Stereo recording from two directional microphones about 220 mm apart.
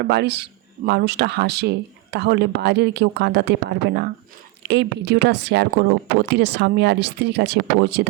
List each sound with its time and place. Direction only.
0.0 s speech: 50° right (ahead or behind)